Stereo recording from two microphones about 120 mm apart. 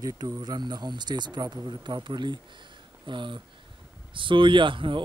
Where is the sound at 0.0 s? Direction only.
35° right (ahead or behind).